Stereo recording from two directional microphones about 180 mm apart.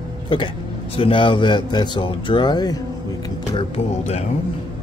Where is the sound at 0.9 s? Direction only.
30° left (ahead or behind).